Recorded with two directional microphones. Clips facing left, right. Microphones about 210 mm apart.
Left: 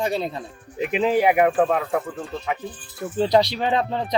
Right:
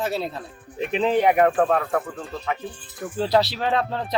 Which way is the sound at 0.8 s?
15° left (ahead or behind).